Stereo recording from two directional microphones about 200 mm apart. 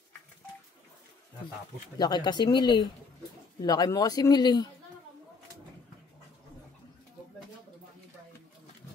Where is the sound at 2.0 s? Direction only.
20° left (ahead or behind).